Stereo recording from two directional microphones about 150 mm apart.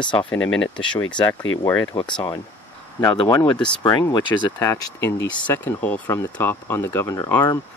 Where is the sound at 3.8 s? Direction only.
30° left (ahead or behind).